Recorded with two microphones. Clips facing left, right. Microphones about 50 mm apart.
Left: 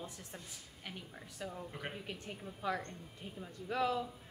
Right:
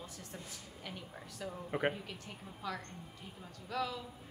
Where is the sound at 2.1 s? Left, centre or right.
Centre.